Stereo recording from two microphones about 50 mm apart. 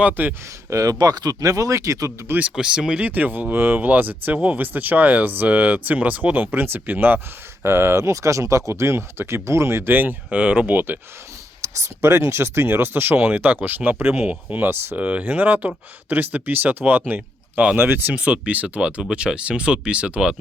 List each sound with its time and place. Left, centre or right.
0.0 s speech: right
0.7 s speech: right
1.7 s speech: right
2.6 s speech: centre
3.0 s speech: right
7.6 s speech: right
9.9 s speech: right
10.3 s speech: right
11.6 s speech: right
14.9 s speech: right